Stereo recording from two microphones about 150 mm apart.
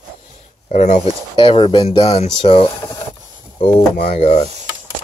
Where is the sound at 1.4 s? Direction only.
35° left (ahead or behind).